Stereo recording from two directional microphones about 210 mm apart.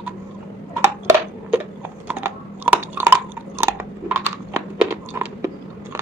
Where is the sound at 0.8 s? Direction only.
10° right (ahead or behind).